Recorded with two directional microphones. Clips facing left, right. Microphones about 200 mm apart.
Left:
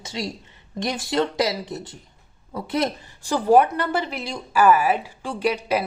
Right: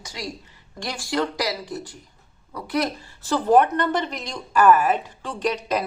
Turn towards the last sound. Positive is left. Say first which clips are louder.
# left 2 dB
turn(degrees=10)  # may be behind; listen again after turning